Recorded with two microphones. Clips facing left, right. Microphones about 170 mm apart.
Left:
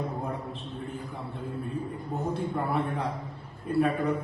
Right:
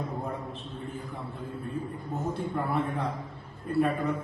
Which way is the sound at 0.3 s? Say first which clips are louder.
Left 1 dB; centre (ahead or behind).